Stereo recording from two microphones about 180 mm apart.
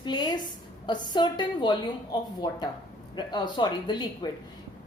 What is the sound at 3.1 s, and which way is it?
A woman's voice, 25° left (ahead or behind).